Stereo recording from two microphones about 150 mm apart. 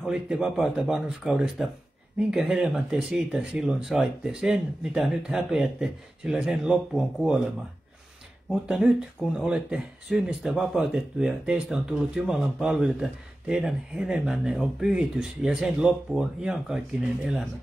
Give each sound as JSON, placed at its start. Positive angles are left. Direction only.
{"t": 0.0, "sound": "speech", "side_deg": -5}
{"t": 8.5, "sound": "speech", "side_deg": 0}